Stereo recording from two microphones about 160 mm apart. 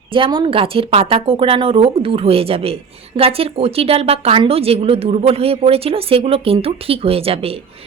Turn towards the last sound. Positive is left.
turn(degrees=-35)  # may be behind; listen again after turning